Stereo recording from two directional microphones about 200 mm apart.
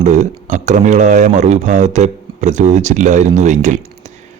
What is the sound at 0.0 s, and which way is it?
Speech, 35° right (ahead or behind).